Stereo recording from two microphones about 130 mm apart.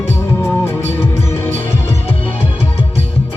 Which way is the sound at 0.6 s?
15° left (ahead or behind).